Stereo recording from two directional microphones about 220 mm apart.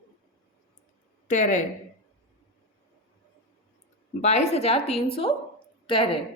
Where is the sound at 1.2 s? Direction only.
35° left (ahead or behind).